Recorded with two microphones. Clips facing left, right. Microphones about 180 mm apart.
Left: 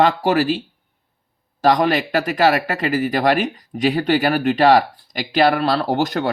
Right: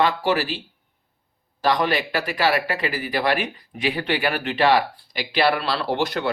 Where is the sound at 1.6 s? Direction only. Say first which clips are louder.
Left 5 dB; 45° left (ahead or behind).